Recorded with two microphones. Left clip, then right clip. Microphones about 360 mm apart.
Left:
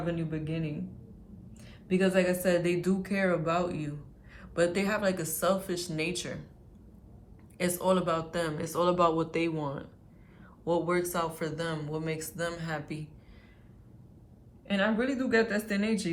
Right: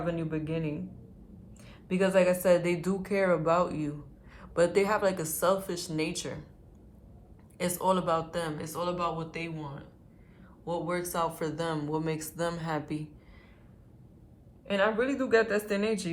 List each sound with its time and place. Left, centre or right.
0.0 s speech: centre
1.9 s speech: centre
7.6 s speech: centre
14.9 s speech: centre